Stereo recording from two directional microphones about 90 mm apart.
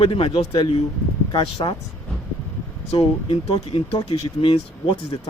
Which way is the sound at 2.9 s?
85° left.